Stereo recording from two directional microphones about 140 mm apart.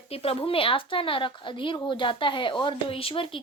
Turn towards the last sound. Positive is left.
turn(degrees=40)  # may be behind; listen again after turning